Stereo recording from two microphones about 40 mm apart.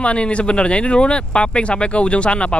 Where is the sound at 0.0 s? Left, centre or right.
Left.